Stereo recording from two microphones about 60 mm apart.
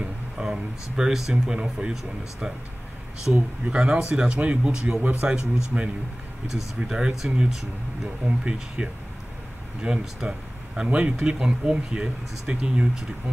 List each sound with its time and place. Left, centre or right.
0.0 s a sound: centre
0.9 s speech: centre
3.3 s speech: centre